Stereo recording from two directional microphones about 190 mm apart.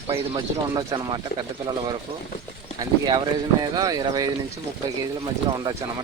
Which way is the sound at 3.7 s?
20° right (ahead or behind).